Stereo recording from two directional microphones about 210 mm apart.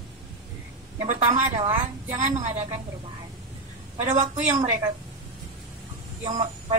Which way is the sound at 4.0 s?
35° right (ahead or behind).